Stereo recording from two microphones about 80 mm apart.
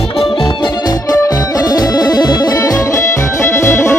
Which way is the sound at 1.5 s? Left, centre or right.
Left.